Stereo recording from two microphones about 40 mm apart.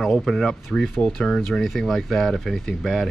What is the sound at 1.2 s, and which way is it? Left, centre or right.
Speech, left.